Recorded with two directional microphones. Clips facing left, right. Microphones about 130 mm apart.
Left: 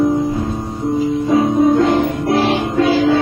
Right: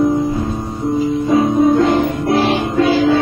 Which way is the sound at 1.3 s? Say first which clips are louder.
Even; centre (ahead or behind).